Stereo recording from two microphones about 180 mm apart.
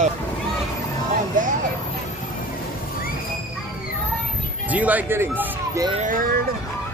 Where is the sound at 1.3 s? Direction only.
45° right (ahead or behind).